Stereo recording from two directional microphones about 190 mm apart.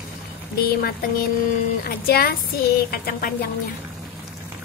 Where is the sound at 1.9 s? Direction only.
50° left (ahead or behind).